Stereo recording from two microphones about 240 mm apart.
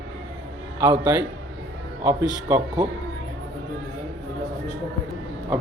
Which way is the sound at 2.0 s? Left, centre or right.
Centre.